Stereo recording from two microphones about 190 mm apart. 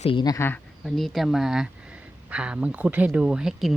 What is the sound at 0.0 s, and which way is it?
Speech, 25° left (ahead or behind).